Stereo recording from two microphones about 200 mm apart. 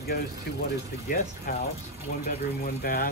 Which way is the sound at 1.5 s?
45° left (ahead or behind).